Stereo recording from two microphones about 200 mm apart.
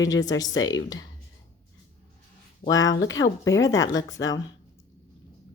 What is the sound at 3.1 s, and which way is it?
Speech, 15° left (ahead or behind).